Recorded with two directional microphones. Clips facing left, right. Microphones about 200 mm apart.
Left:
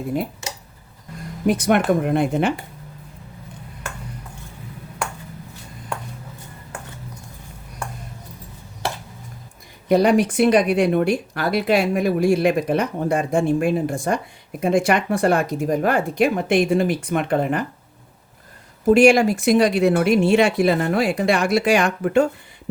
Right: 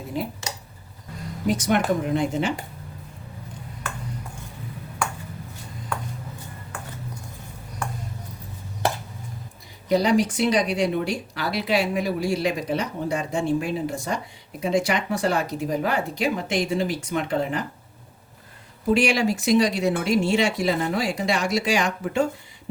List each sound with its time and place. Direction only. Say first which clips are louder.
1.5 s speech: left 4 dB; 60° left (ahead or behind)
9.9 s speech: left 4 dB; 60° left (ahead or behind)
18.9 s speech: left 7 dB; 50° left (ahead or behind)